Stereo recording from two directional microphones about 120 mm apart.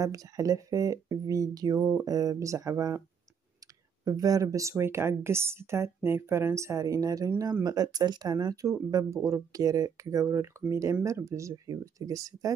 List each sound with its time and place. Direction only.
0.0 s speech: 30° right (ahead or behind)
4.0 s speech: 30° right (ahead or behind)